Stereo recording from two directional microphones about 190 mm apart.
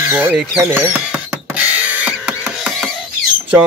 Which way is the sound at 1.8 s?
5° right (ahead or behind).